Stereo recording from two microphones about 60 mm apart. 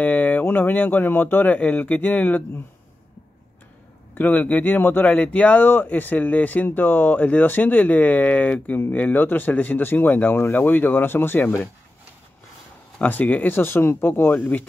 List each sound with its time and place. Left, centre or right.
0.0 s speech: left
4.2 s speech: left
13.0 s speech: left
14.3 s speech: left